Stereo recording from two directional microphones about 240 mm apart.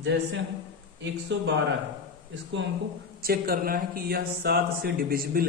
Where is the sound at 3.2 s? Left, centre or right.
Right.